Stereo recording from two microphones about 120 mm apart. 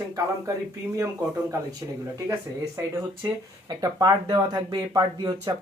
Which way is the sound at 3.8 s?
30° right (ahead or behind).